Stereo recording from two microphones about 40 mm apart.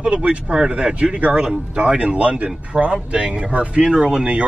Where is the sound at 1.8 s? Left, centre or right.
Right.